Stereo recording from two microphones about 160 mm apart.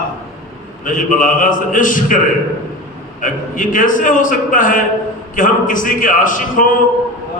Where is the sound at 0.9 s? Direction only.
55° left (ahead or behind).